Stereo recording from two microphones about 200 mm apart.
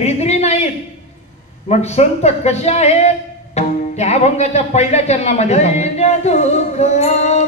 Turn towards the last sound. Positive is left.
turn(degrees=35)  # may be behind; listen again after turning